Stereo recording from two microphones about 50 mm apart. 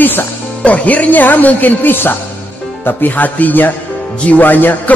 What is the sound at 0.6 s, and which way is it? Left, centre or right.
Speech, left.